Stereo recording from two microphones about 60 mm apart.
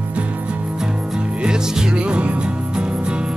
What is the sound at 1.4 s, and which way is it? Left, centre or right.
Music, centre.